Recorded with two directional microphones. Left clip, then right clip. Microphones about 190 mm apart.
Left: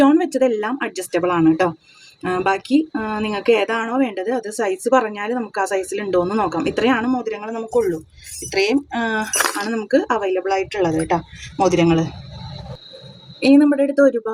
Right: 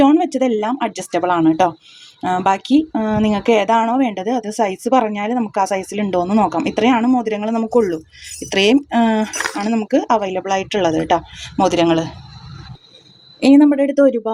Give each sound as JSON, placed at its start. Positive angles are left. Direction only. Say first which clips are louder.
{"t": 0.0, "sound": "speech", "louder": "right 1 dB", "side_deg": -25}
{"t": 13.4, "sound": "speech", "louder": "right 2 dB", "side_deg": -30}